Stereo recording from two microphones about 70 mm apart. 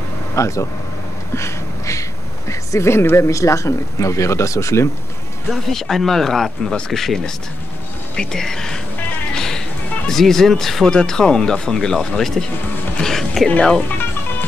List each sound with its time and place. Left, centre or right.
0.4 s speech: left
1.3 s a sound: left
2.7 s speech: left
5.5 s speech: centre
9.3 s music: centre
10.0 s speech: centre